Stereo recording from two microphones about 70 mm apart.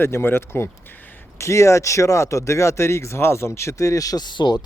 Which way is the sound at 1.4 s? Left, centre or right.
Left.